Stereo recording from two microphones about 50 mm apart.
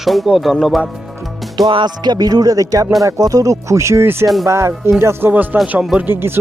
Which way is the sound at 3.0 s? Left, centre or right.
Right.